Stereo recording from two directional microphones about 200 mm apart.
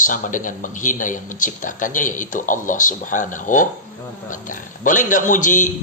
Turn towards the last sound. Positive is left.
turn(degrees=40)  # may be behind; listen again after turning